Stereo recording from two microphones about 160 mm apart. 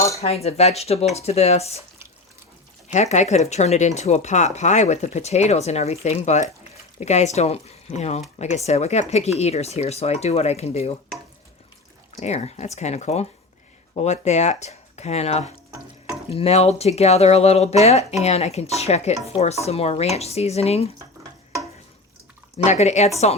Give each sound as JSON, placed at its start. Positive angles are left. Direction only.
{"t": 0.2, "sound": "speech", "side_deg": 40}
{"t": 2.9, "sound": "speech", "side_deg": 45}
{"t": 12.1, "sound": "speech", "side_deg": 45}
{"t": 22.5, "sound": "speech", "side_deg": 45}